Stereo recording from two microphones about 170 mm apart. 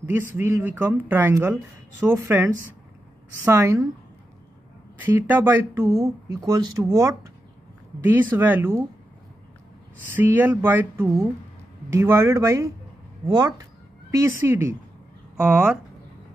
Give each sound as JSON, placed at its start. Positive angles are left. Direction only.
{"t": 0.1, "sound": "speech", "side_deg": -15}
{"t": 4.9, "sound": "speech", "side_deg": -10}
{"t": 10.1, "sound": "speech", "side_deg": -10}